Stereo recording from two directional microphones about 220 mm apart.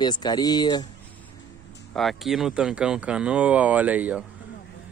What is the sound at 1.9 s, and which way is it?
Speech, centre (ahead or behind).